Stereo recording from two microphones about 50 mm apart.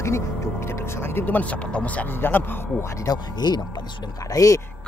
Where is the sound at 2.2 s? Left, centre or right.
Left.